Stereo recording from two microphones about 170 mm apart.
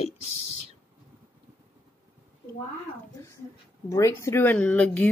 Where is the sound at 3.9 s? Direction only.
15° left (ahead or behind).